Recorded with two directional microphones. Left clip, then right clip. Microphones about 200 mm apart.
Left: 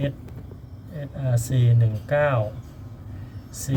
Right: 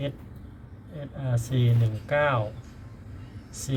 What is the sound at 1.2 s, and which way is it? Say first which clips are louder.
Speech: left 2 dB; centre (ahead or behind).